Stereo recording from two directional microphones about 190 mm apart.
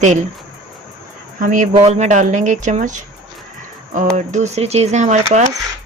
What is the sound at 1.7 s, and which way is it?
Speech, 35° right (ahead or behind).